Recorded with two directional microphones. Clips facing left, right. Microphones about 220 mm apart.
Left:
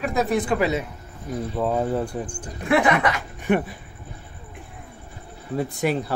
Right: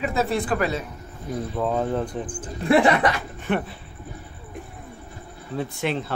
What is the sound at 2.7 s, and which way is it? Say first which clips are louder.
Speech: right 2 dB; 35° right (ahead or behind).